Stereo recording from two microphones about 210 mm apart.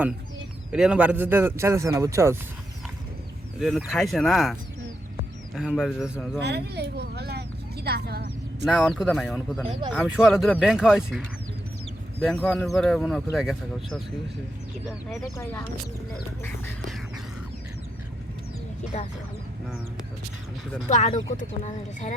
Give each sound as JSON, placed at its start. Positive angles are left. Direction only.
{"t": 0.7, "sound": "speech", "side_deg": -5}
{"t": 3.6, "sound": "speech", "side_deg": 0}
{"t": 5.5, "sound": "speech", "side_deg": 0}
{"t": 6.4, "sound": "speech", "side_deg": -55}
{"t": 8.6, "sound": "speech", "side_deg": 0}
{"t": 12.3, "sound": "speech", "side_deg": 5}
{"t": 20.9, "sound": "speech", "side_deg": 35}